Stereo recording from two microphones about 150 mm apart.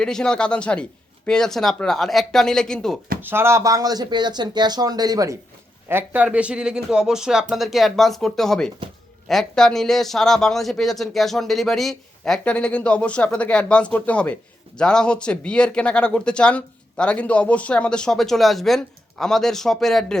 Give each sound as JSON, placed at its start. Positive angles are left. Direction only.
{"t": 0.0, "sound": "speech", "side_deg": 5}
{"t": 3.2, "sound": "speech", "side_deg": -15}
{"t": 5.9, "sound": "speech", "side_deg": -10}